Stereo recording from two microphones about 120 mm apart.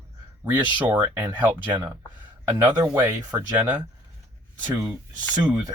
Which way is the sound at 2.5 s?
20° right (ahead or behind).